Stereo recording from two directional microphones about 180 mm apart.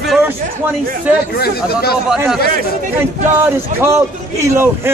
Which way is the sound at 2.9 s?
15° right (ahead or behind).